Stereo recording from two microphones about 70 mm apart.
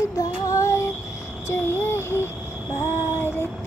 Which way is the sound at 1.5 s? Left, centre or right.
Left.